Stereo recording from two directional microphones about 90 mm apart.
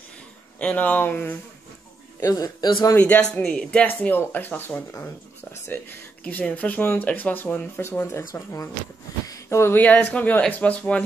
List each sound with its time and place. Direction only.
0.6 s speech: 15° left (ahead or behind)
2.1 s a man's voice: 40° left (ahead or behind)
3.0 s speech: 15° left (ahead or behind); by 8.6 s 35° left (ahead or behind)
9.3 s a sound: 30° left (ahead or behind)
9.8 s speech: 20° left (ahead or behind)